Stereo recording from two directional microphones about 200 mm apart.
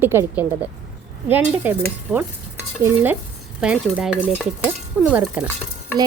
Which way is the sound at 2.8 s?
10° right (ahead or behind).